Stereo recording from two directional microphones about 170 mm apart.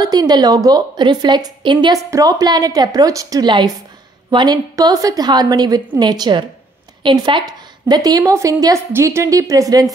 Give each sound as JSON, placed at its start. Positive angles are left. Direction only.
{"t": 0.0, "sound": "a woman's voice", "side_deg": -25}